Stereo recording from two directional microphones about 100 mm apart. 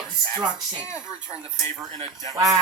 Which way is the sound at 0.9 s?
10° right (ahead or behind).